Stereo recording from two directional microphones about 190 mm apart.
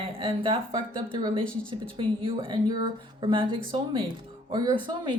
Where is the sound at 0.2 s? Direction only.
30° right (ahead or behind).